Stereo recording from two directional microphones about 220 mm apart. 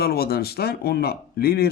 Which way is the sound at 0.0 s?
45° left (ahead or behind).